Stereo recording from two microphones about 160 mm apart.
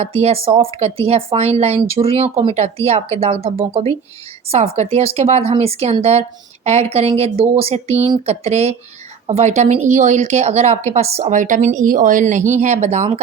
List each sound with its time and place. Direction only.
0.0 s a woman's voice: 40° right (ahead or behind)